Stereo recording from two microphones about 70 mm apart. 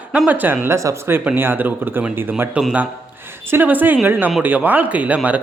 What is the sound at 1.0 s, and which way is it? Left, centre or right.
Speech, right.